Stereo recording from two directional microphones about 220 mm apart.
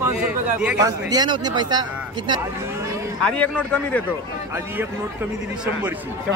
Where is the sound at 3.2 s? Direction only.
5° left (ahead or behind).